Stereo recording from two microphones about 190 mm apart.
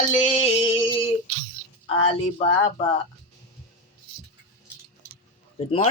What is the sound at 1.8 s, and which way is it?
Speech, 30° left (ahead or behind).